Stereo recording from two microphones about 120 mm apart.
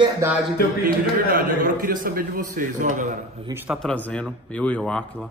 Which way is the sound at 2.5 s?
90° right.